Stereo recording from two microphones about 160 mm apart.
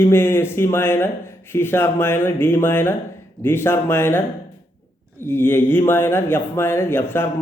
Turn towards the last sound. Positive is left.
turn(degrees=15)  # may be behind; listen again after turning